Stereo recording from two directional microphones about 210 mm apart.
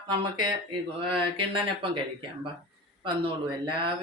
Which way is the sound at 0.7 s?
25° right (ahead or behind).